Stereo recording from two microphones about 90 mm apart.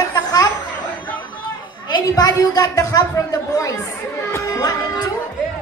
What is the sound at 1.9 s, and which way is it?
A woman's voice, 45° left (ahead or behind).